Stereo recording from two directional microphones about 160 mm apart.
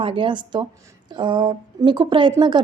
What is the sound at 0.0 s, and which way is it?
Speech, 30° right (ahead or behind).